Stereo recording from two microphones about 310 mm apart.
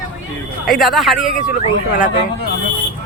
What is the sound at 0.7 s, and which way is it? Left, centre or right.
Speech, centre.